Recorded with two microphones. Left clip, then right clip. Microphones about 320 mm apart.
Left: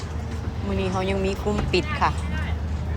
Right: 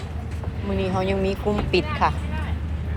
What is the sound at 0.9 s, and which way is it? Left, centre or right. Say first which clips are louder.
Speech: right 2 dB; centre.